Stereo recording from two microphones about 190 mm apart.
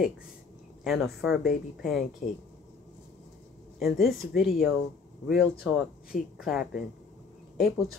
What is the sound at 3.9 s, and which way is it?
Speech, 55° left (ahead or behind).